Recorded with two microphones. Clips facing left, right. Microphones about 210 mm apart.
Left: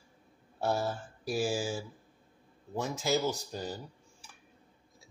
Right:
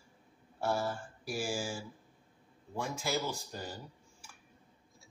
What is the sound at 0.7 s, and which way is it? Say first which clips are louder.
Speech: left 2 dB; 20° left (ahead or behind).